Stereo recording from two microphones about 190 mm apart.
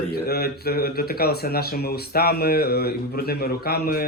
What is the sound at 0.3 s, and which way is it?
Speech, 55° left (ahead or behind).